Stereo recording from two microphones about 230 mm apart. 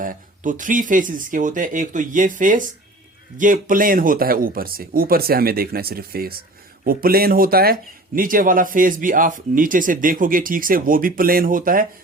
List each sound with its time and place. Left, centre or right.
0.0 s speech: right